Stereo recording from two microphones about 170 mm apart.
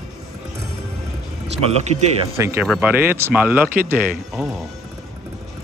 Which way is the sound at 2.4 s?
15° right (ahead or behind).